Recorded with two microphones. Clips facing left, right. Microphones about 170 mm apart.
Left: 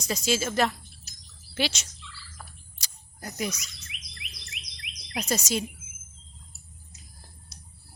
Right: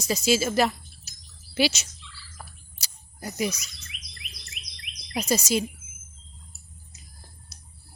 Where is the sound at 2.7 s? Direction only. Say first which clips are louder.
Right 2 dB; 5° right (ahead or behind).